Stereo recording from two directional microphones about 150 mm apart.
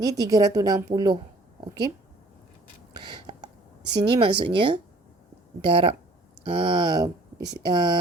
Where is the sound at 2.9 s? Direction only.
30° right (ahead or behind).